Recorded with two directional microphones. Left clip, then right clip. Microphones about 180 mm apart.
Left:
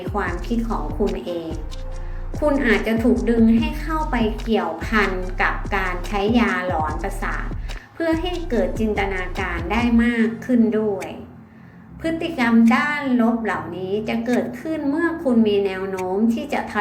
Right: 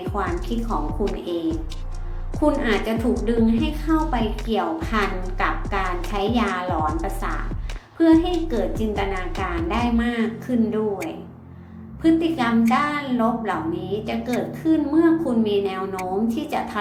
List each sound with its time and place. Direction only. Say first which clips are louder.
0.1 s a woman's voice: left 2 dB; 5° left (ahead or behind)
2.4 s a woman's voice: left 2 dB; centre (ahead or behind)
12.0 s a woman's voice: right 2 dB; centre (ahead or behind)